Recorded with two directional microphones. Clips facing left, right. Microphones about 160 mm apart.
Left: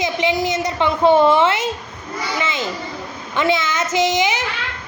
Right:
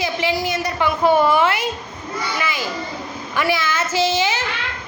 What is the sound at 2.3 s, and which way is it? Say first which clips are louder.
Children playing: left 3 dB; 25° left (ahead or behind).